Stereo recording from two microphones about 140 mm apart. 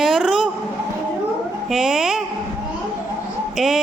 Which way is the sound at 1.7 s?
5° right (ahead or behind).